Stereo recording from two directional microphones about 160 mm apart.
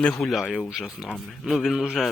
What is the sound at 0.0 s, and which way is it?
A man's voice, 5° left (ahead or behind).